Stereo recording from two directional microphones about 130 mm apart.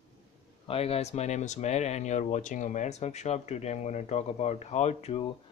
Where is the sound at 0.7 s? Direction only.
50° left (ahead or behind).